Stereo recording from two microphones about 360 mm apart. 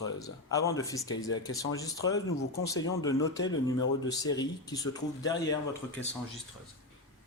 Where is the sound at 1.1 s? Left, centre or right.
Left.